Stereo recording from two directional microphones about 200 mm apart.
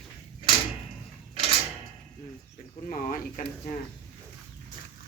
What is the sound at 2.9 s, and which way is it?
Speech, 40° left (ahead or behind).